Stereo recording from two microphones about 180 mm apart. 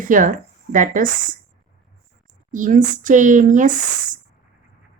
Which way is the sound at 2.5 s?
45° right (ahead or behind).